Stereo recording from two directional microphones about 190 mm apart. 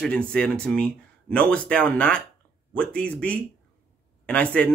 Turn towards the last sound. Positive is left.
turn(degrees=5)  # may be behind; listen again after turning